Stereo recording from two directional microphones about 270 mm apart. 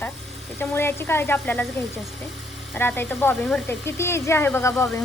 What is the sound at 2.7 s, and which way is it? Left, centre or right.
A woman's voice, centre.